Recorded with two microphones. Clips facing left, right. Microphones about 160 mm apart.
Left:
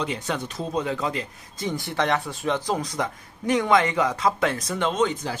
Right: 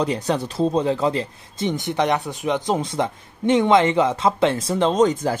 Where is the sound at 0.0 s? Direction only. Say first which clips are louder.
Right 6 dB; 35° right (ahead or behind).